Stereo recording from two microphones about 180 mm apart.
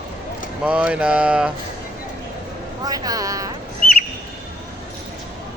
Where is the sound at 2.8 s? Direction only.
20° right (ahead or behind).